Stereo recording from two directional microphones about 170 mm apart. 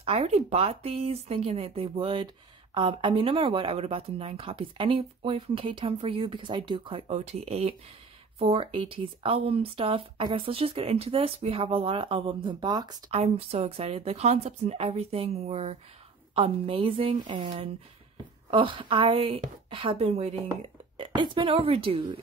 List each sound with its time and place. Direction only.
0.0 s speech: 35° right (ahead or behind)
13.1 s speech: 35° right (ahead or behind)